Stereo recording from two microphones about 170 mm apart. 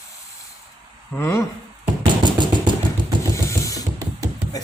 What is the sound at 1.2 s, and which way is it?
Speech, 15° left (ahead or behind).